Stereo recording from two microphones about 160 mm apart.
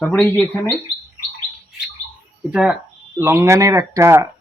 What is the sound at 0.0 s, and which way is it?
Speech, 10° left (ahead or behind).